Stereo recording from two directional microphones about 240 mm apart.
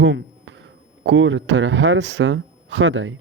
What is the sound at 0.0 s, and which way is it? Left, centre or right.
Speech, right.